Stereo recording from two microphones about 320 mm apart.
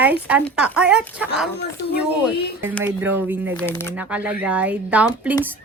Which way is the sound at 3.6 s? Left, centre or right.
Centre.